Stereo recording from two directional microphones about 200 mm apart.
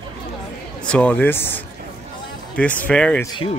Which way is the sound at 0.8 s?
5° left (ahead or behind).